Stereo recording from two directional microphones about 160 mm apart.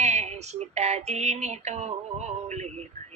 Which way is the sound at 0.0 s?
45° right (ahead or behind).